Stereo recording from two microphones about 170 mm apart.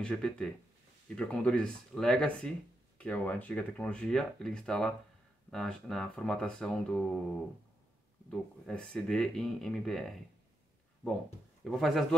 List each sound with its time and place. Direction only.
0.0 s speech: 5° left (ahead or behind)
8.3 s speech: 5° left (ahead or behind)
11.6 s speech: centre (ahead or behind)